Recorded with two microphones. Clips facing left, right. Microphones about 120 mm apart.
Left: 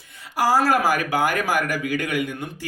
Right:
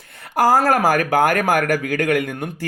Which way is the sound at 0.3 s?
50° right (ahead or behind).